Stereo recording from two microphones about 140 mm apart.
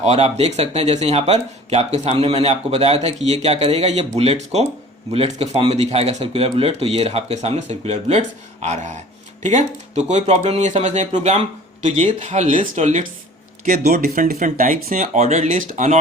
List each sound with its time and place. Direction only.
0.0 s speech: 50° right (ahead or behind)